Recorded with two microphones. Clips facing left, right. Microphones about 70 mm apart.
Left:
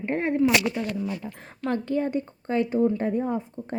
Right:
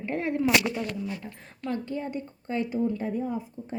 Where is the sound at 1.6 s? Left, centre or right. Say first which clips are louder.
Left 6 dB; left.